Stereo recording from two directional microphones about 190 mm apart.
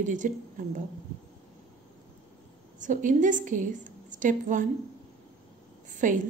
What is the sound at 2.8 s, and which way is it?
A woman's voice, 40° right (ahead or behind).